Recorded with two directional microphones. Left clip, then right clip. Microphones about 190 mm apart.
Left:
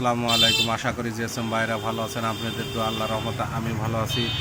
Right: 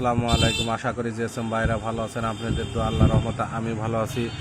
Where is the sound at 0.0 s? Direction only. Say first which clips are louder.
Left 2 dB; 25° right (ahead or behind).